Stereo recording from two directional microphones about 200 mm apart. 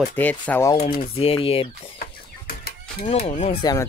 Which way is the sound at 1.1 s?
30° left (ahead or behind).